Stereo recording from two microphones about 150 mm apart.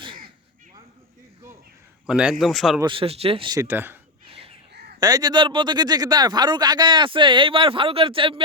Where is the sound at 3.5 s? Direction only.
15° right (ahead or behind).